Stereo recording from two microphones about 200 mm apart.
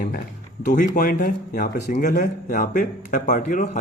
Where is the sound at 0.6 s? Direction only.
40° left (ahead or behind).